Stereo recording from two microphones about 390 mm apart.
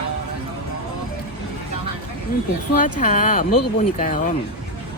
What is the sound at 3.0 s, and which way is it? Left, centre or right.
Speech, centre.